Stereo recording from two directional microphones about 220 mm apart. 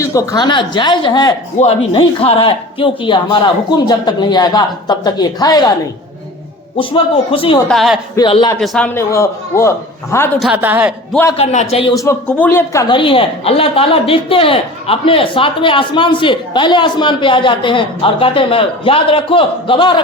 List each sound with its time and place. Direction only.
0.0 s a woman's voice: 15° left (ahead or behind)
6.7 s a woman's voice: 25° left (ahead or behind)
7.7 s a woman's voice: centre (ahead or behind)
8.1 s a woman's voice: 20° left (ahead or behind)
8.6 s a woman's voice: centre (ahead or behind)
9.0 s a man's voice: 15° left (ahead or behind)
10.4 s a woman's voice: 10° right (ahead or behind)
11.3 s a woman's voice: 30° left (ahead or behind)